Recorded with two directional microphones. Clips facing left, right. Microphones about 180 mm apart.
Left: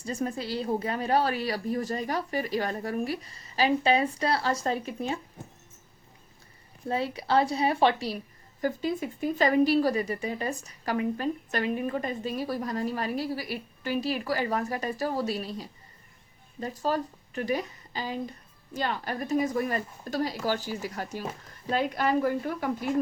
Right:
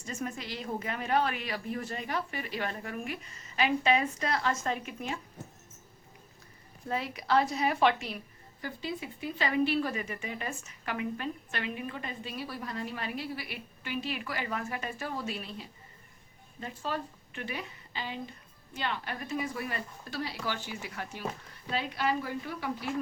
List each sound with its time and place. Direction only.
0.0 s speech: 35° left (ahead or behind)
6.8 s speech: 30° left (ahead or behind)
8.6 s a woman's voice: 45° left (ahead or behind)